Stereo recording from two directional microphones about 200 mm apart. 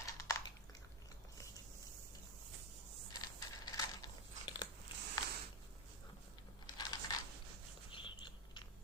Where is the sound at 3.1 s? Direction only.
20° left (ahead or behind).